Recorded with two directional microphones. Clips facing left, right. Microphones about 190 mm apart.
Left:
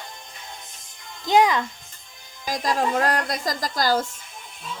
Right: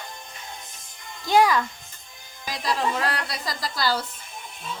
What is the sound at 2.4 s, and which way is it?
A woman's voice, 45° left (ahead or behind).